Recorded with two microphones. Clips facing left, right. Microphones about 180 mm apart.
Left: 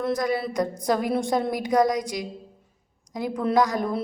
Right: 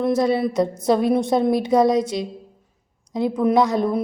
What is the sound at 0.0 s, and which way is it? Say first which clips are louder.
A woman's voice: right 6 dB; 25° right (ahead or behind).